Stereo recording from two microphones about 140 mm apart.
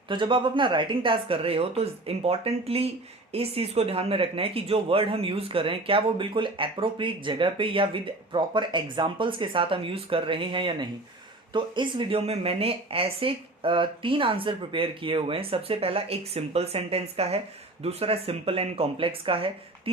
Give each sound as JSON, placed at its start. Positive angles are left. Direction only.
{"t": 0.1, "sound": "speech", "side_deg": -35}